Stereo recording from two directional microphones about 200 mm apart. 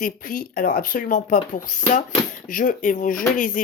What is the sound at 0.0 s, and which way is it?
Speech, 45° left (ahead or behind).